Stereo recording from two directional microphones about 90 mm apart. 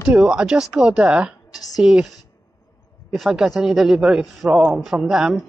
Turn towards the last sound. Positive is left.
turn(degrees=-5)  # may be behind; listen again after turning